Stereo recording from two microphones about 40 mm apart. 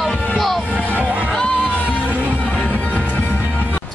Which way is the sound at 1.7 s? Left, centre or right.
Left.